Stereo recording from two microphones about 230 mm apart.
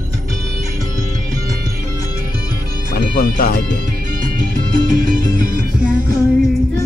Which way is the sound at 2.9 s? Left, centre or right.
Left.